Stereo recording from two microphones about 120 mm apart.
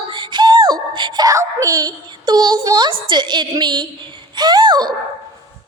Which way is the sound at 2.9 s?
40° right (ahead or behind).